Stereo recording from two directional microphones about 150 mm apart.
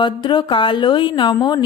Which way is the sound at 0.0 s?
30° left (ahead or behind).